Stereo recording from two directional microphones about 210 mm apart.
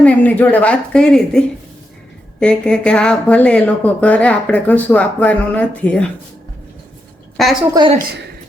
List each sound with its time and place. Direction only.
0.0 s a woman's voice: 5° left (ahead or behind)
7.7 s a woman's voice: 20° right (ahead or behind)